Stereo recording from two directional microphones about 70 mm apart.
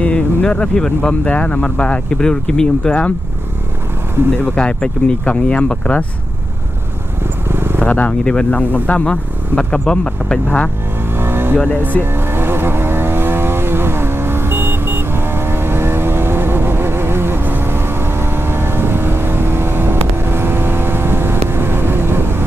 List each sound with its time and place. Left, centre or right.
0.0 s speech: centre
4.6 s speech: centre
7.4 s wild animals: right
7.8 s speech: left
11.1 s vehicle: right
11.5 s speech: left
12.0 s vehicle: right